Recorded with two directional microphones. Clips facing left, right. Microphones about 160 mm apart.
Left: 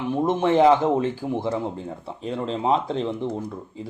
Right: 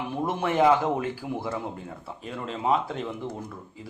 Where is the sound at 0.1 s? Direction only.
20° left (ahead or behind).